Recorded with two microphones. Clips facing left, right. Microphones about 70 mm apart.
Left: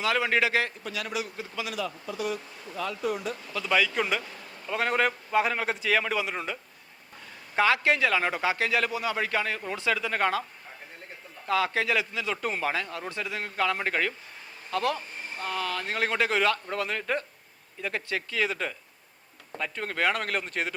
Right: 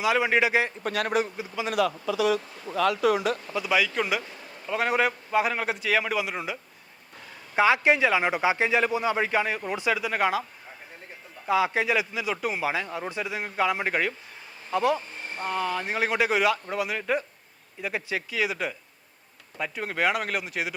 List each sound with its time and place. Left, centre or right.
0.0 s a man's voice: centre
0.8 s a man's voice: right
1.7 s speech: right
3.5 s a man's voice: centre
7.5 s a man's voice: centre
11.4 s a man's voice: centre